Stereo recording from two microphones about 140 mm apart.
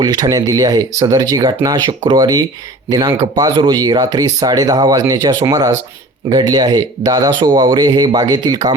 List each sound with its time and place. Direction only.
0.0 s speech: 25° right (ahead or behind)